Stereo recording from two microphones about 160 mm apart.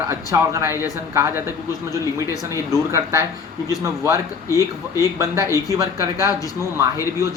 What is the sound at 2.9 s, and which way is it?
A man's voice, 15° right (ahead or behind).